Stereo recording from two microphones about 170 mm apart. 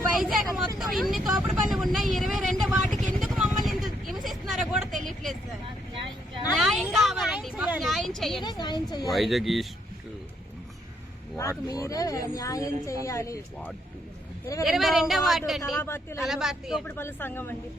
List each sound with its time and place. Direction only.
0.2 s vehicle: centre (ahead or behind)
0.8 s speech: centre (ahead or behind)
2.7 s vehicle: centre (ahead or behind)
6.6 s a sound: centre (ahead or behind)
8.4 s speech: 25° left (ahead or behind)
9.0 s a woman's voice: centre (ahead or behind)
11.3 s speech: 15° left (ahead or behind)
14.6 s a woman's voice: centre (ahead or behind)
15.8 s speech: 15° left (ahead or behind)
16.2 s a woman's voice: centre (ahead or behind)
16.8 s speech: 15° left (ahead or behind)